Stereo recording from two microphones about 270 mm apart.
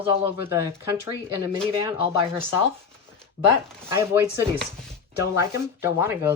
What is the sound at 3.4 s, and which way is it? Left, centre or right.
Speech, right.